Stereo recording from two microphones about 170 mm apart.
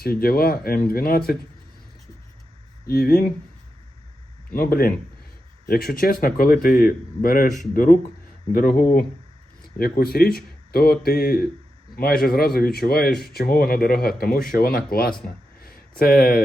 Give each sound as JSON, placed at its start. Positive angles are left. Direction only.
{"t": 0.0, "sound": "a man's voice", "side_deg": 60}
{"t": 2.8, "sound": "a man's voice", "side_deg": 65}
{"t": 4.5, "sound": "a man's voice", "side_deg": 60}
{"t": 15.6, "sound": "a sound", "side_deg": 60}